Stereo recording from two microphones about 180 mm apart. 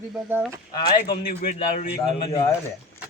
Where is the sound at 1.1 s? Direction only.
55° left (ahead or behind).